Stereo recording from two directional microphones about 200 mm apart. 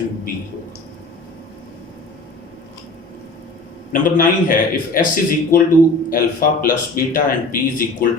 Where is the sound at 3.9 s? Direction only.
45° left (ahead or behind).